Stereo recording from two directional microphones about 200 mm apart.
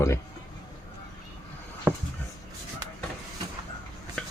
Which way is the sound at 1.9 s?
10° right (ahead or behind).